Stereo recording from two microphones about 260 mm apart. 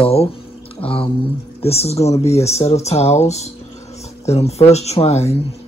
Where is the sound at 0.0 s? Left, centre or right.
Left.